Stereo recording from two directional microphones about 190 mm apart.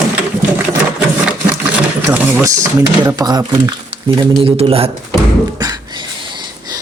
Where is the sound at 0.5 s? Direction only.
5° right (ahead or behind).